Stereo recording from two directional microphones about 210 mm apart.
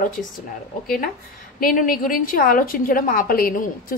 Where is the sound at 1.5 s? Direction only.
40° left (ahead or behind).